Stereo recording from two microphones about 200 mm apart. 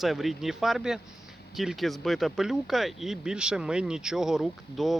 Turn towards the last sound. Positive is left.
turn(degrees=0)  # may be behind; listen again after turning